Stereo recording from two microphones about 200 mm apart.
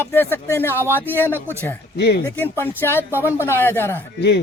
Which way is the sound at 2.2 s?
10° left (ahead or behind).